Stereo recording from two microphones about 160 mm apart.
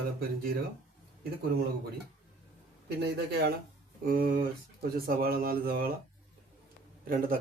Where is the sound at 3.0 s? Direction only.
90° right.